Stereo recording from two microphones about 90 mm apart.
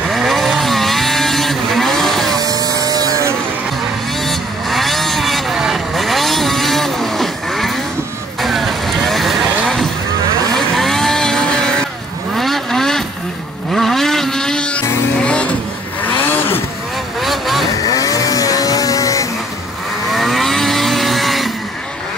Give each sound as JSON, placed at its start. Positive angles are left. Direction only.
{"t": 0.1, "sound": "vehicle", "side_deg": 0}
{"t": 2.3, "sound": "vehicle", "side_deg": -45}
{"t": 4.2, "sound": "vehicle", "side_deg": 0}
{"t": 17.2, "sound": "vehicle", "side_deg": 0}
{"t": 17.8, "sound": "vehicle", "side_deg": 40}
{"t": 20.1, "sound": "vehicle", "side_deg": 0}